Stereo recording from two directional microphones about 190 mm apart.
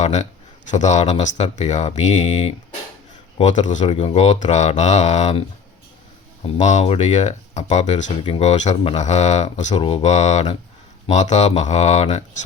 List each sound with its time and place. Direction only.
0.0 s speech: 35° left (ahead or behind)
6.4 s speech: 40° left (ahead or behind)